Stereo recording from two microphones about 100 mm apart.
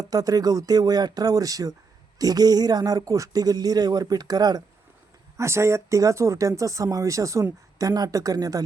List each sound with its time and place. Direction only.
0.0 s speech: 40° right (ahead or behind)
5.4 s speech: 30° right (ahead or behind)